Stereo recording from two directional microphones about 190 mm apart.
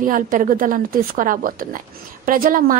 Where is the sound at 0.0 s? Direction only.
45° right (ahead or behind).